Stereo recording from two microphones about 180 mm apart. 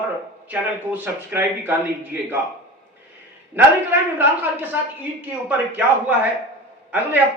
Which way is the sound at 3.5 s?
10° right (ahead or behind).